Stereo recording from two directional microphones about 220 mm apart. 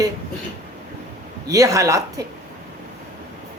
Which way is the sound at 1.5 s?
15° right (ahead or behind).